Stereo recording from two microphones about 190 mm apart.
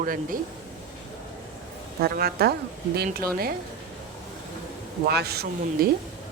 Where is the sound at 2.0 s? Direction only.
55° right (ahead or behind).